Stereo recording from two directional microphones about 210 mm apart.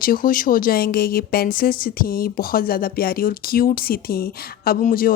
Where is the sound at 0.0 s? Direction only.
40° left (ahead or behind).